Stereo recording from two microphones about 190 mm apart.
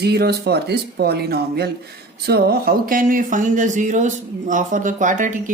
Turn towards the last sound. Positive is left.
turn(degrees=-40)  # may be behind; listen again after turning